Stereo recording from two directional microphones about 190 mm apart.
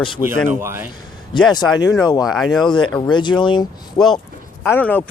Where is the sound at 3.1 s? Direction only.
25° left (ahead or behind).